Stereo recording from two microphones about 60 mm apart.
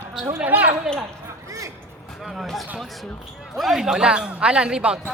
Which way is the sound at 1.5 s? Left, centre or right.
Right.